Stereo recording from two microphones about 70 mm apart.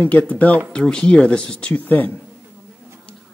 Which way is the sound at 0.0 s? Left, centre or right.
Left.